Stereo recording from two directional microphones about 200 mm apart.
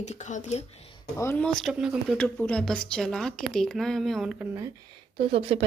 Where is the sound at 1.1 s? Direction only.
10° left (ahead or behind).